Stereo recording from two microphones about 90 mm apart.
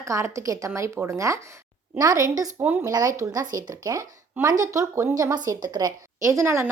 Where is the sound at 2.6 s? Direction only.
20° right (ahead or behind).